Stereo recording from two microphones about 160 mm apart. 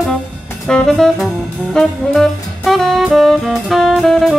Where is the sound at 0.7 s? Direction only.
5° left (ahead or behind).